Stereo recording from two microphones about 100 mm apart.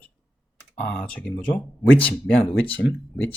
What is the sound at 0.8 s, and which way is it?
Speech, 10° left (ahead or behind).